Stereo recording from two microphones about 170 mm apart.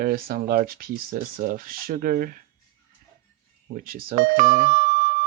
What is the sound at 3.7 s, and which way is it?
Speech, 60° right (ahead or behind).